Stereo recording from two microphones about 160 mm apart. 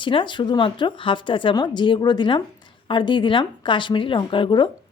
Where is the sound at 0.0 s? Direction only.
30° left (ahead or behind).